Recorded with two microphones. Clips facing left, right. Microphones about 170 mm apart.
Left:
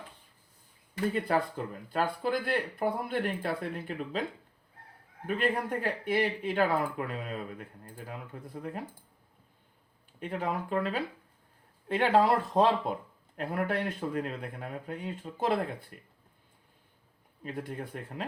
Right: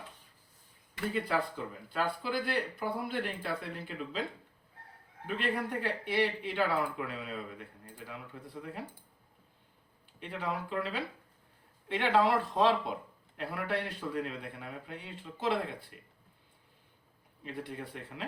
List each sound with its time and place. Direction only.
0.9 s speech: 45° left (ahead or behind)
5.2 s speech: 45° left (ahead or behind)
10.2 s speech: 45° left (ahead or behind)
17.4 s speech: 45° left (ahead or behind)